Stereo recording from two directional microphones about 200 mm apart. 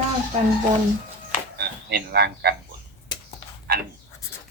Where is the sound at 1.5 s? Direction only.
55° right (ahead or behind).